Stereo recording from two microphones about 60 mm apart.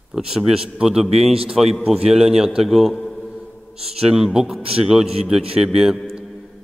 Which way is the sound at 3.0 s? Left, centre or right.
Centre.